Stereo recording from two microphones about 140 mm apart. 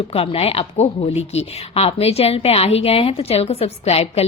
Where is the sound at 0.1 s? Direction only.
45° left (ahead or behind).